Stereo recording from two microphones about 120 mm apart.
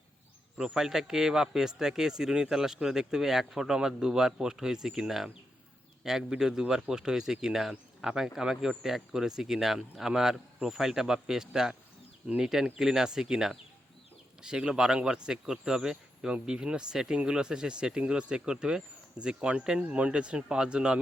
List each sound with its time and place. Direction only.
0.5 s speech: 5° right (ahead or behind)